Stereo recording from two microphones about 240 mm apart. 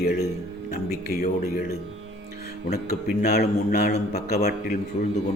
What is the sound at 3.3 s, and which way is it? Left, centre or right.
A man's voice, left.